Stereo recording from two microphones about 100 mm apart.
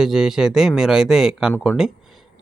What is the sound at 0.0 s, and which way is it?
Speech, 5° right (ahead or behind).